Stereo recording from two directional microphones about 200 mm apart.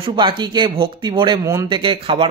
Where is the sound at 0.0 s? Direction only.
25° right (ahead or behind).